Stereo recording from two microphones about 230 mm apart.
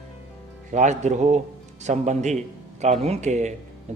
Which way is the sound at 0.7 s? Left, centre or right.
Right.